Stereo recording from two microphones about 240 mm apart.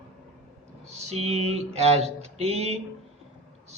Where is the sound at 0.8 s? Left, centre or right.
Right.